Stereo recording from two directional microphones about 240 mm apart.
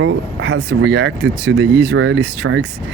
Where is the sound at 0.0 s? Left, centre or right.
Right.